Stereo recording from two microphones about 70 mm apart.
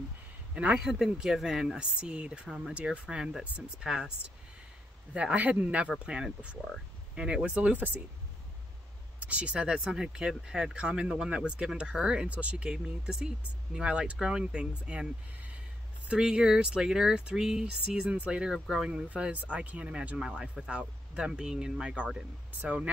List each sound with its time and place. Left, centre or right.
0.6 s speech: centre
0.8 s speech: centre
5.1 s speech: centre
9.2 s speech: centre